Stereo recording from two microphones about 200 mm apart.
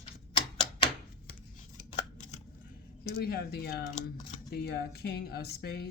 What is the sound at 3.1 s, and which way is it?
Speech, 50° left (ahead or behind).